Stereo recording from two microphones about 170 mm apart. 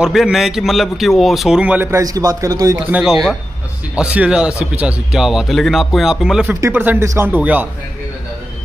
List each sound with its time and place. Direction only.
0.0 s a man's voice: centre (ahead or behind); by 2.8 s 20° right (ahead or behind)
2.9 s a man's voice: centre (ahead or behind)